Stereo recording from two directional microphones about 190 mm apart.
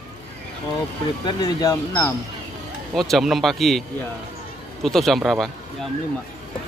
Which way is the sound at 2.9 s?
Centre (ahead or behind).